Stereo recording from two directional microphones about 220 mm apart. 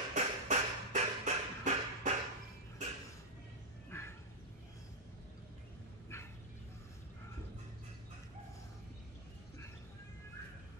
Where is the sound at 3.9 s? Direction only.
10° left (ahead or behind).